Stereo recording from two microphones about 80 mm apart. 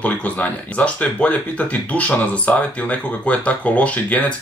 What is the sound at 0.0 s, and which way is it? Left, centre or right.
Speech, centre.